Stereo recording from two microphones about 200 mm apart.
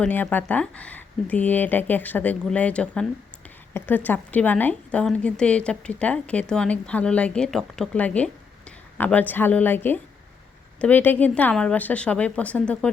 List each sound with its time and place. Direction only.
0.0 s speech: 10° left (ahead or behind)